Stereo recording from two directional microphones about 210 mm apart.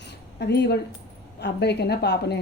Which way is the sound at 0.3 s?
55° left (ahead or behind).